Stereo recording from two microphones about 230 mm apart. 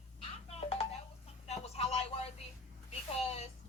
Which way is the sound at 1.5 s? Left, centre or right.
Left.